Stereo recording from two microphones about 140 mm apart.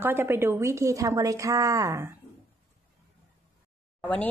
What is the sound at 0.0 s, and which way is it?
A woman's voice, 15° right (ahead or behind).